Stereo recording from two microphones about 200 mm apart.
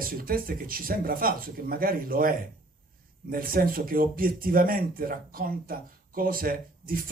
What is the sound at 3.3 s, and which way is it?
Speech, 45° right (ahead or behind).